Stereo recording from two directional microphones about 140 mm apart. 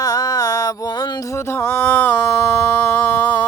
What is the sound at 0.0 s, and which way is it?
Music, 25° left (ahead or behind).